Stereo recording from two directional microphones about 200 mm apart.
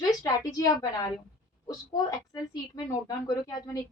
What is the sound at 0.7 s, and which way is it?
Speech, 20° left (ahead or behind).